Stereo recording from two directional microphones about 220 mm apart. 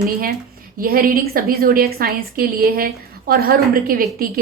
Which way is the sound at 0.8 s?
40° right (ahead or behind).